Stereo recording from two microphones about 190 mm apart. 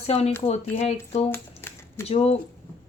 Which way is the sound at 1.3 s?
15° left (ahead or behind).